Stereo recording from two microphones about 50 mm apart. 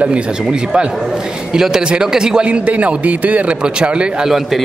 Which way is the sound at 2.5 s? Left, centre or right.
Right.